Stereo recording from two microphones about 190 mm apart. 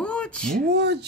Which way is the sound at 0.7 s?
60° right (ahead or behind).